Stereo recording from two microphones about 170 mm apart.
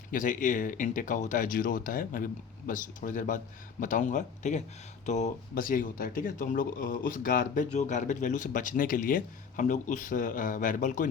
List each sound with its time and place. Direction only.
0.1 s speech: 50° left (ahead or behind)